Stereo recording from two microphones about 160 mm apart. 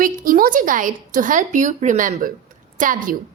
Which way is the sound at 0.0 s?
60° right (ahead or behind).